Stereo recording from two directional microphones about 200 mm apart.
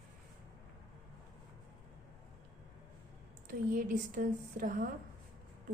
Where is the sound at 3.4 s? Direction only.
40° right (ahead or behind).